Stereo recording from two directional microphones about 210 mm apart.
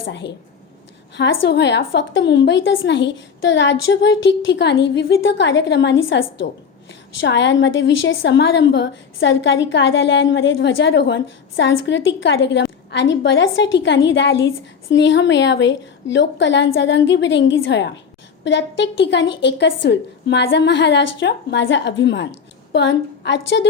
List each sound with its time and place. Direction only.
0.1 s a woman's voice: 55° left (ahead or behind)